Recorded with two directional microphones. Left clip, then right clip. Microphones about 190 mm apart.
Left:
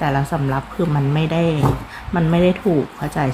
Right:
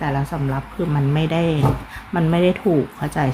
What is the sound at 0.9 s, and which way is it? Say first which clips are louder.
Speech: right 1 dB; 5° right (ahead or behind).